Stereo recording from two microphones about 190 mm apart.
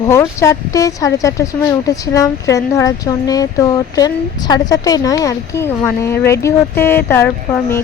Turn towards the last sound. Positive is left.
turn(degrees=10)  # may be behind; listen again after turning